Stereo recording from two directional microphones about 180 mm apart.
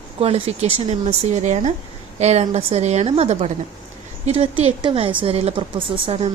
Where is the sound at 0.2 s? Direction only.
35° right (ahead or behind).